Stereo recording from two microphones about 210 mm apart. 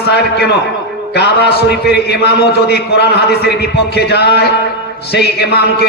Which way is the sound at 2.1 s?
50° left (ahead or behind).